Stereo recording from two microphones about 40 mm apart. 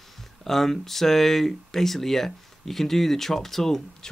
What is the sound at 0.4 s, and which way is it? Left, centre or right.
Speech, centre.